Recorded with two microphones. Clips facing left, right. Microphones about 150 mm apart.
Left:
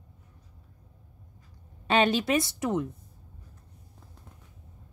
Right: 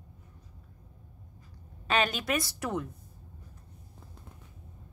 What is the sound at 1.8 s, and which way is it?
A woman's voice, 30° left (ahead or behind).